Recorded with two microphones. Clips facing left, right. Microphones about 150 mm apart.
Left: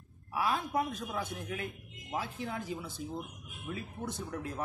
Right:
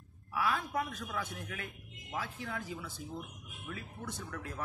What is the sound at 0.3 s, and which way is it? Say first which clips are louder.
Speech: left 2 dB; 25° left (ahead or behind).